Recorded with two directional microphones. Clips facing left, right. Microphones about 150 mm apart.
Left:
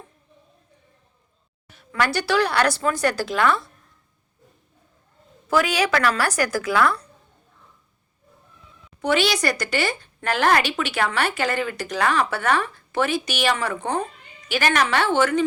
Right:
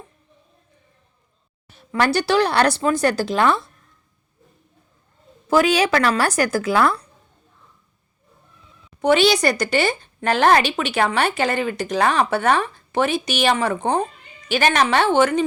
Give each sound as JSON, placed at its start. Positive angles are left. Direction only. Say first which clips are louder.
{"t": 1.6, "sound": "speech", "louder": "right 4 dB", "side_deg": -30}
{"t": 5.5, "sound": "speech", "louder": "right 4 dB", "side_deg": -30}
{"t": 9.0, "sound": "speech", "louder": "right 5 dB", "side_deg": -25}